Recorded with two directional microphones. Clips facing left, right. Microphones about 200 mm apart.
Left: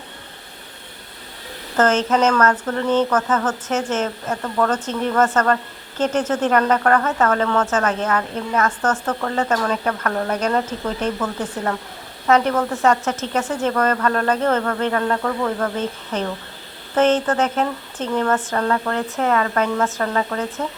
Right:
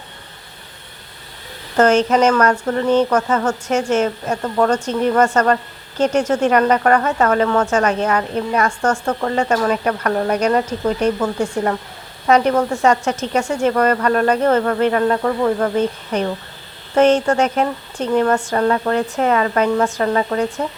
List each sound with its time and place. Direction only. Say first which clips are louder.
1.7 s speech: right 4 dB; 15° right (ahead or behind)